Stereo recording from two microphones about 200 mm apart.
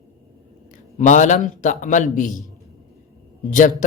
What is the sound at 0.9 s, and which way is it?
Speech, 40° left (ahead or behind).